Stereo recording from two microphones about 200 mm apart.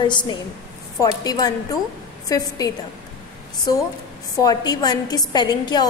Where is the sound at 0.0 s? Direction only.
20° left (ahead or behind).